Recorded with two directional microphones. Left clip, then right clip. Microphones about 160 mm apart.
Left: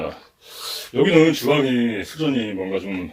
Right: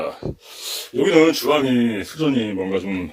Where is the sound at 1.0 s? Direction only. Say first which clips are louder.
Right 1 dB; 30° right (ahead or behind).